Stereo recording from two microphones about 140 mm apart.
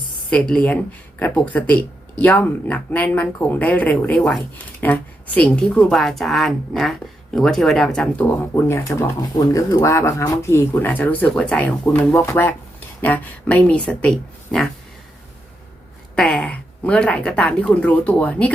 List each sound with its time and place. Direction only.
0.3 s speech: 5° left (ahead or behind)
8.5 s speech: 20° left (ahead or behind)
16.1 s speech: 5° left (ahead or behind)